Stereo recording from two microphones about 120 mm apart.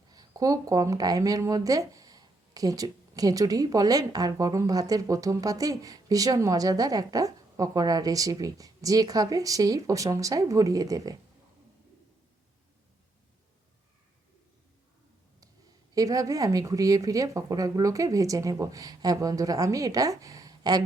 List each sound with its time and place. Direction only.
0.1 s speech: 30° right (ahead or behind)
16.0 s speech: 30° right (ahead or behind)